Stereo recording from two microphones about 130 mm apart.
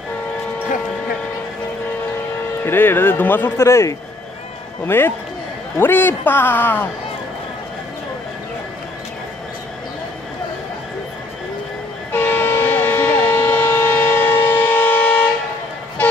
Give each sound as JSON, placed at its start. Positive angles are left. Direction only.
{"t": 2.6, "sound": "speech", "side_deg": 15}
{"t": 12.1, "sound": "vehicle", "side_deg": 15}